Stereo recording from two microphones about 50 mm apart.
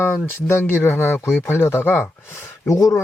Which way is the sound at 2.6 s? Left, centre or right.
Left.